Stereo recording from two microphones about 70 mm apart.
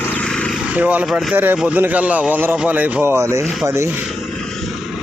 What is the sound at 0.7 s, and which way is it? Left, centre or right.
Speech, right.